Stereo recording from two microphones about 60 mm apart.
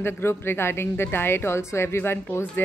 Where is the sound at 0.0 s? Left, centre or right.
Left.